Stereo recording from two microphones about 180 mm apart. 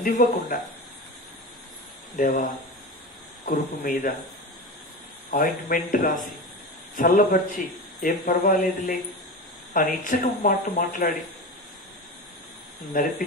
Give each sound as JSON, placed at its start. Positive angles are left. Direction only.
{"t": 0.0, "sound": "speech", "side_deg": 55}
{"t": 2.1, "sound": "speech", "side_deg": 45}
{"t": 3.4, "sound": "speech", "side_deg": 45}
{"t": 5.3, "sound": "speech", "side_deg": 55}
{"t": 12.9, "sound": "speech", "side_deg": 50}